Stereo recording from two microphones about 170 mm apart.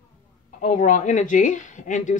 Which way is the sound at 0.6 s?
45° left (ahead or behind).